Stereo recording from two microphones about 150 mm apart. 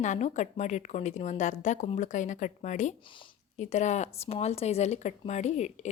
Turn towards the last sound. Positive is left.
turn(degrees=50)  # may be behind; listen again after turning